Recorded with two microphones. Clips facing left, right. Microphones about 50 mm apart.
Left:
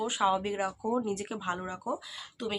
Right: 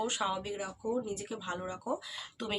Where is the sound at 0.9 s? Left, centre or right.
Left.